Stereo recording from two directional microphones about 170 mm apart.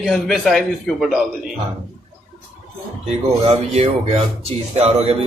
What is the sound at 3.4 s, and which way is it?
Speech, 40° right (ahead or behind).